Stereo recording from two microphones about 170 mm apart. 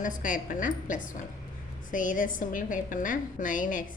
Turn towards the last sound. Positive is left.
turn(degrees=50)  # may be behind; listen again after turning